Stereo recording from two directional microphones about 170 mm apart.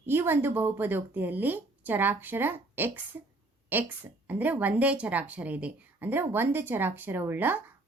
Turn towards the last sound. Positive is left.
turn(degrees=-10)  # may be behind; listen again after turning